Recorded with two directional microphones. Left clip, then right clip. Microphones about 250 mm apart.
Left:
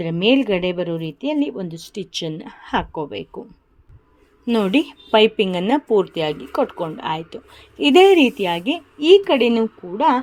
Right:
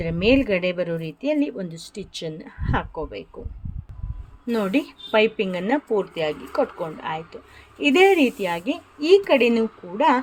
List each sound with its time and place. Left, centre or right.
0.0 s a woman's voice: centre
4.4 s a woman's voice: left